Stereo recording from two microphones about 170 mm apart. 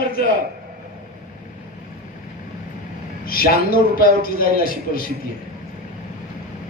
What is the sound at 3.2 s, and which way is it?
A man's voice, 60° left (ahead or behind).